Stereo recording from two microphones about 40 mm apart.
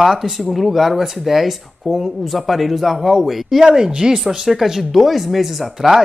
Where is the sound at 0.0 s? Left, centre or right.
Centre.